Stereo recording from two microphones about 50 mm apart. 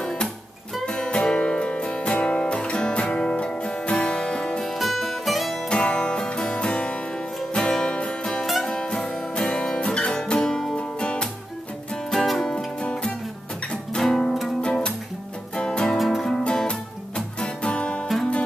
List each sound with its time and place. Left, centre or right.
0.0 s music: centre
2.1 s guitar: left
4.7 s music: centre
5.7 s music: centre
14.6 s music: centre
16.0 s music: centre
16.3 s music: centre